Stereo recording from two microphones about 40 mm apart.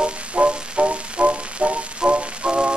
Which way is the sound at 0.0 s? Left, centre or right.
Right.